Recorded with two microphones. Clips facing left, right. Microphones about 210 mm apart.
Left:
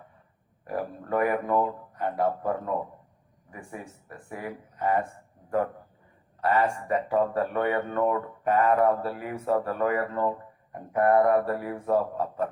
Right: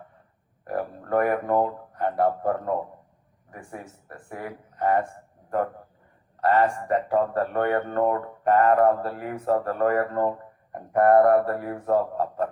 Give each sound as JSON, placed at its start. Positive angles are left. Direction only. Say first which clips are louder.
{"t": 0.7, "sound": "a man's voice", "louder": "right 3 dB", "side_deg": -50}
{"t": 3.5, "sound": "speech", "louder": "right 1 dB", "side_deg": -50}
{"t": 6.4, "sound": "speech", "louder": "right 3 dB", "side_deg": -50}